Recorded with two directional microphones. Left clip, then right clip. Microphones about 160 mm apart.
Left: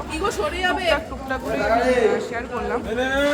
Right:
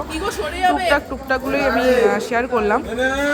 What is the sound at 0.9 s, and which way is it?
Speech, 30° right (ahead or behind).